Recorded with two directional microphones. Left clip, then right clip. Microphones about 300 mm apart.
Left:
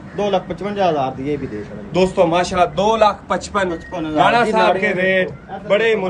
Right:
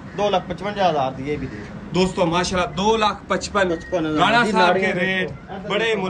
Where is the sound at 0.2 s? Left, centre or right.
Right.